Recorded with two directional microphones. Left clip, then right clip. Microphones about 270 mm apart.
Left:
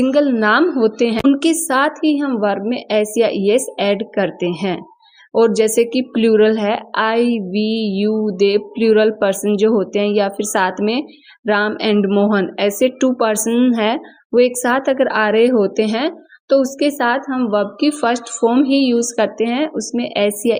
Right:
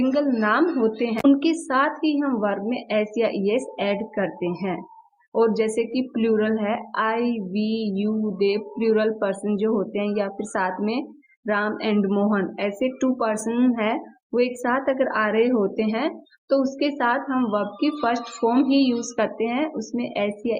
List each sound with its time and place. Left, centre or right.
0.0 s a woman's voice: left